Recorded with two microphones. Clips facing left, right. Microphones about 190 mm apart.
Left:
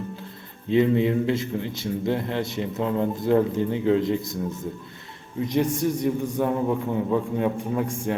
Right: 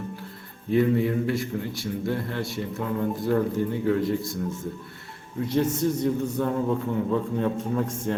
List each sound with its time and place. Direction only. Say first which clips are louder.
0.7 s a man's voice: left 2 dB; 20° left (ahead or behind)
5.4 s a man's voice: left 1 dB; 15° left (ahead or behind)